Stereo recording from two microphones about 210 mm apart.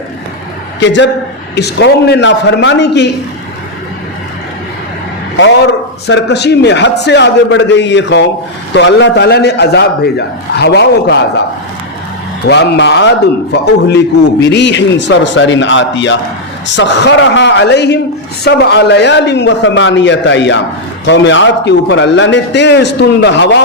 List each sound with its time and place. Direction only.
0.8 s a man's voice: 60° left (ahead or behind)
6.1 s a man's voice: 55° left (ahead or behind)
12.5 s a man's voice: 55° left (ahead or behind)